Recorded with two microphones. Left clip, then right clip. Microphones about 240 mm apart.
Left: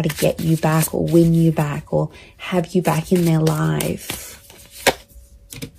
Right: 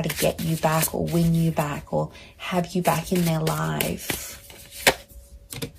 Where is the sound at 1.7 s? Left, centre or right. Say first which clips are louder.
Left 5 dB; left.